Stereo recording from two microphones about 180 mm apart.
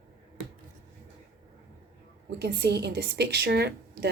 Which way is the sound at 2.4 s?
65° right (ahead or behind).